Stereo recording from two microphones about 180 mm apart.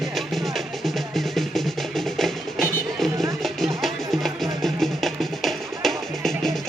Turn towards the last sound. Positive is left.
turn(degrees=0)  # may be behind; listen again after turning